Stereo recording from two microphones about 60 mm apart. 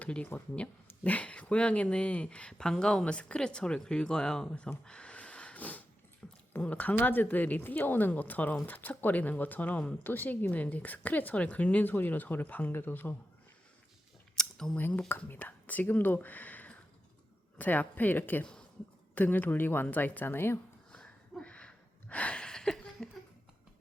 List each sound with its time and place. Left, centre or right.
0.0 s speech: left
4.9 s snort: centre
6.5 s a woman's voice: left
14.3 s a sound: centre
14.8 s a woman's voice: left
20.9 s a sound: centre